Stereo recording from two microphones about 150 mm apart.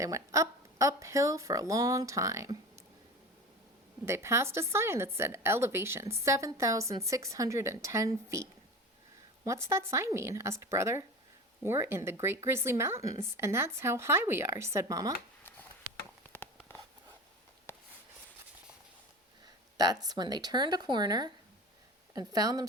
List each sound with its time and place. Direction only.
0.0 s a woman's voice: 20° right (ahead or behind)
4.0 s a woman's voice: 20° right (ahead or behind)
16.3 s a sound: 15° left (ahead or behind)
19.7 s a woman's voice: 25° right (ahead or behind)